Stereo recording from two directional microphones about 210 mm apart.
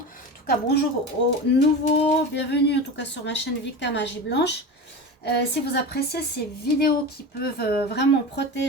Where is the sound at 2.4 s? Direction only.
55° left (ahead or behind).